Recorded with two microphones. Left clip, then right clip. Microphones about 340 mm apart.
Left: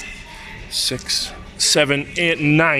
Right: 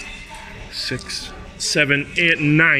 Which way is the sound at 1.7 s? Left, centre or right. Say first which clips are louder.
Right 1 dB; centre.